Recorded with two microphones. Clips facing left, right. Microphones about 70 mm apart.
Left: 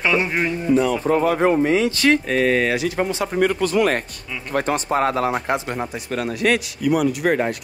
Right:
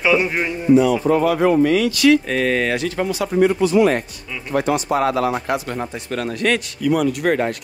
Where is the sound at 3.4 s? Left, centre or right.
Left.